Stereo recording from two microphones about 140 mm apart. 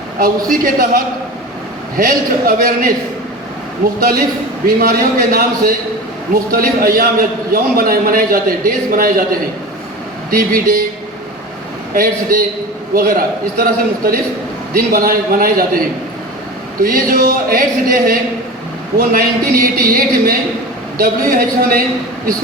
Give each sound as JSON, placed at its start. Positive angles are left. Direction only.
{"t": 0.4, "sound": "a man's voice", "side_deg": -80}
{"t": 3.8, "sound": "a man's voice", "side_deg": -65}
{"t": 4.6, "sound": "a man's voice", "side_deg": -90}
{"t": 11.9, "sound": "a man's voice", "side_deg": -90}